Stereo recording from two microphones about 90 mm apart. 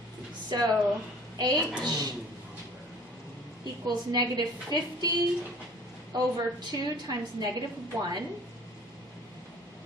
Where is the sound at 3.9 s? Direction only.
50° right (ahead or behind).